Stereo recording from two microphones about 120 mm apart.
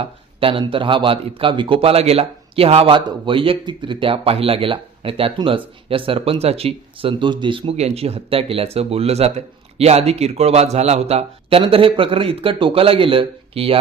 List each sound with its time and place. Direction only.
0.0 s a man's voice: 50° right (ahead or behind)
7.8 s speech: 60° right (ahead or behind)